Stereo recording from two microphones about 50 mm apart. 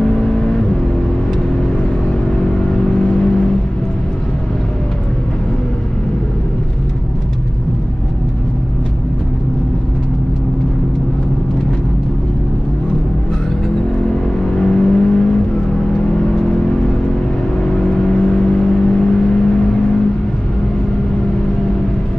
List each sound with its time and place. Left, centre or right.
0.0 s vehicle: centre
2.0 s vehicle: centre
14.0 s vehicle: centre